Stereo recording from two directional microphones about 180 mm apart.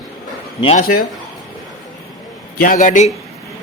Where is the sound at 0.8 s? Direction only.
50° left (ahead or behind).